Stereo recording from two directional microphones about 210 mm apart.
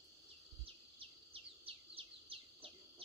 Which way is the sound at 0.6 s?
25° right (ahead or behind).